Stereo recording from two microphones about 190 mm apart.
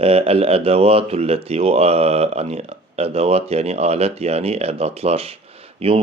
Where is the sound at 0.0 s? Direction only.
30° right (ahead or behind).